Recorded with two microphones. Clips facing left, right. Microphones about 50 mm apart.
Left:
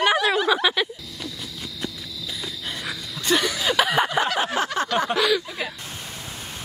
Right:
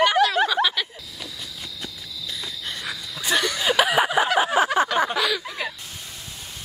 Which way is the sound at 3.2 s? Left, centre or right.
Centre.